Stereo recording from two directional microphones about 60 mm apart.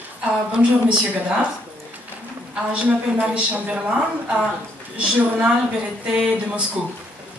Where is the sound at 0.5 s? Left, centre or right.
Centre.